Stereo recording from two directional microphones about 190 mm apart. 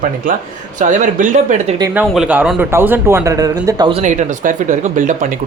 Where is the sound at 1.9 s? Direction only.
10° right (ahead or behind); by 4.0 s 25° right (ahead or behind).